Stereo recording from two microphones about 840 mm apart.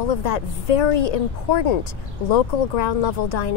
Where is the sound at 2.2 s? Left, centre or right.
Left.